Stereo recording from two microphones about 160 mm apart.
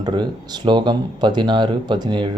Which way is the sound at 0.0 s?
30° right (ahead or behind).